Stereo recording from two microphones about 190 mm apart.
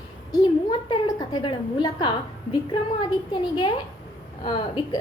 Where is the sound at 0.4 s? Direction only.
25° left (ahead or behind).